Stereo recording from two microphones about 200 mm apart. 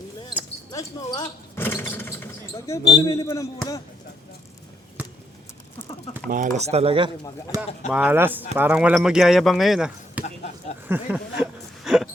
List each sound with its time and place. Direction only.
0.7 s basketball bounce: 20° left (ahead or behind)
1.9 s a sound: 10° left (ahead or behind)
3.0 s speech: 15° left (ahead or behind)
6.2 s speech: 45° right (ahead or behind)
6.7 s speech: 30° right (ahead or behind)
7.5 s speech: 15° right (ahead or behind)
7.9 s speech: 5° right (ahead or behind)
10.8 s a sound: 10° right (ahead or behind)